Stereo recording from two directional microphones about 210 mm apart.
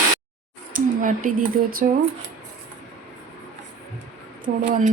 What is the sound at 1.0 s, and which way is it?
Speech, 40° right (ahead or behind).